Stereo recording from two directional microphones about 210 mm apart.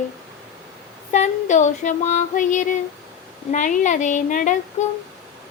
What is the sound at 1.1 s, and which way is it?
Speech, 35° left (ahead or behind).